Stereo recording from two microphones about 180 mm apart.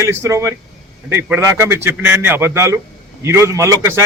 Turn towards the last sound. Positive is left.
turn(degrees=-15)  # may be behind; listen again after turning